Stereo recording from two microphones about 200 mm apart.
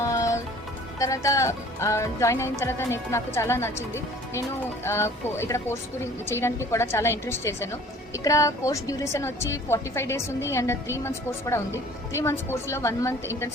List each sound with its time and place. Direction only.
0.0 s music: 15° left (ahead or behind)
0.9 s a woman's voice: 15° left (ahead or behind)